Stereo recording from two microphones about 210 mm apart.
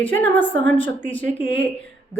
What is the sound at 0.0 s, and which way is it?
Speech, 10° left (ahead or behind).